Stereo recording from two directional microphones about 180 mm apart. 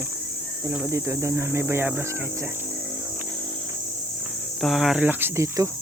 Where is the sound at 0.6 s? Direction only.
10° right (ahead or behind).